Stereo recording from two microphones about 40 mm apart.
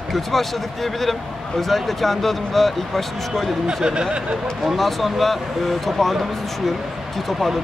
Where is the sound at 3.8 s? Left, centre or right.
Right.